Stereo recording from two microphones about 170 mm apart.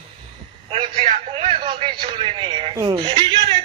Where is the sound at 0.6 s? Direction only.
30° right (ahead or behind).